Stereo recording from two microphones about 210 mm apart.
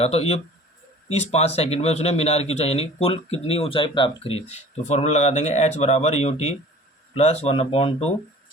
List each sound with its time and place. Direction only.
0.0 s speech: 30° left (ahead or behind)